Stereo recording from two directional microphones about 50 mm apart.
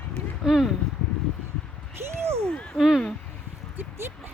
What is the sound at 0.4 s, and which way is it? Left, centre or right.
Speech, centre.